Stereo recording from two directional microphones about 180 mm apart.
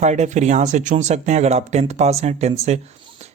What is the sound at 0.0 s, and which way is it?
Speech, 40° right (ahead or behind).